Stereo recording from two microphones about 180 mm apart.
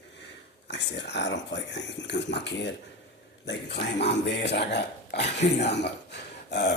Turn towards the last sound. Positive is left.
turn(degrees=70)  # may be behind; listen again after turning